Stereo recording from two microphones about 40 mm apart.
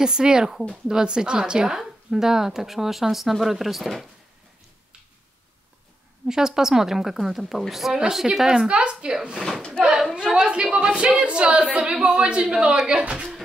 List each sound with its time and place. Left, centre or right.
0.0 s a woman's voice: centre
6.2 s a woman's voice: centre
8.6 s a woman's voice: right